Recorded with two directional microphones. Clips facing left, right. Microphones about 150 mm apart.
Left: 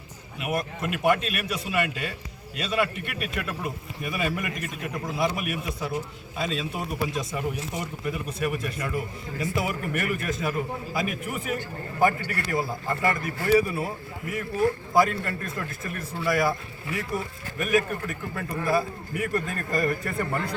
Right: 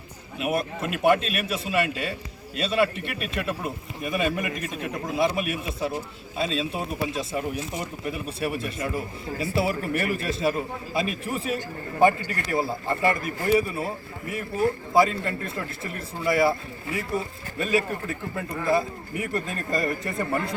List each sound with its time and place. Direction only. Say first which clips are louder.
0.3 s a man's voice: right 3 dB; 25° right (ahead or behind)